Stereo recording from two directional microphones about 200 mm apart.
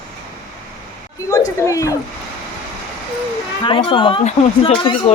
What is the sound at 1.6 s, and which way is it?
Speech, 15° left (ahead or behind).